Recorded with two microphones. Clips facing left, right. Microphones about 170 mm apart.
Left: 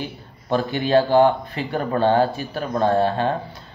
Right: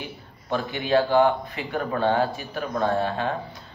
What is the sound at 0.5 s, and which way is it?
Speech, 35° left (ahead or behind).